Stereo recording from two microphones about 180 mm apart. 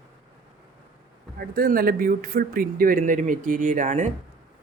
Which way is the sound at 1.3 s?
55° right (ahead or behind).